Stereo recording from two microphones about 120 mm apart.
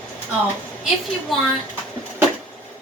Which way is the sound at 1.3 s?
Centre (ahead or behind).